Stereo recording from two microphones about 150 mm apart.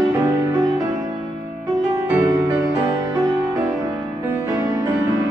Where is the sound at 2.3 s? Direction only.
20° right (ahead or behind).